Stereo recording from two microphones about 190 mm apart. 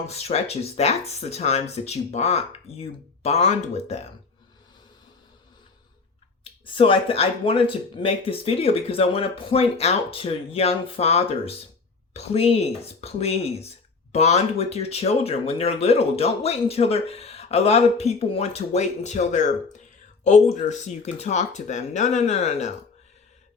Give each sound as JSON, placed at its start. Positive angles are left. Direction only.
{"t": 0.1, "sound": "speech", "side_deg": 35}
{"t": 6.4, "sound": "speech", "side_deg": 25}